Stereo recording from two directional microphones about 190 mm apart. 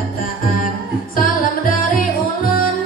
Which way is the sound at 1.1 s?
50° left (ahead or behind).